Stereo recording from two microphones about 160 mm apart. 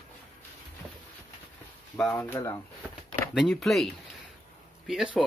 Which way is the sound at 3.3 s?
Centre (ahead or behind).